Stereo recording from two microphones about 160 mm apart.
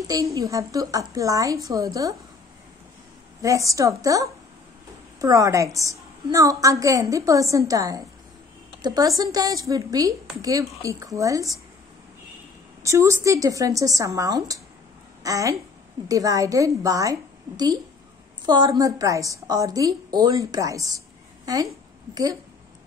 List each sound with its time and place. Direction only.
0.0 s a woman's voice: 20° right (ahead or behind)
3.4 s a woman's voice: 20° right (ahead or behind)
12.8 s a woman's voice: 20° right (ahead or behind)
22.1 s a woman's voice: 25° right (ahead or behind)